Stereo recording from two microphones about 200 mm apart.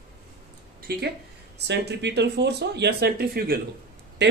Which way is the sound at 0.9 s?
50° right (ahead or behind).